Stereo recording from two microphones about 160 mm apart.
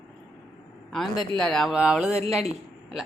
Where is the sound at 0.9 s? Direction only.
Centre (ahead or behind).